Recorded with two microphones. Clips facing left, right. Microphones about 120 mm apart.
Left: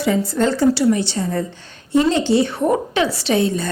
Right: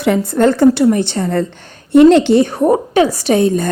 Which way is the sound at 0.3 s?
55° right (ahead or behind).